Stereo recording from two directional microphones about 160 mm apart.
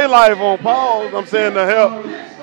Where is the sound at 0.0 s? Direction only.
15° right (ahead or behind).